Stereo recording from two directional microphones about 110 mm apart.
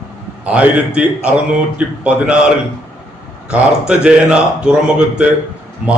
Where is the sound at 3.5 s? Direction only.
10° right (ahead or behind).